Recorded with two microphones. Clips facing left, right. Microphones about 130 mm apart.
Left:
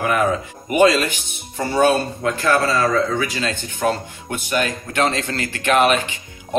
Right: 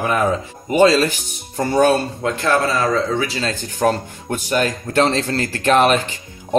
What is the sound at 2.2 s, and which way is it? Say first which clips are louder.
Speech: even; 20° right (ahead or behind).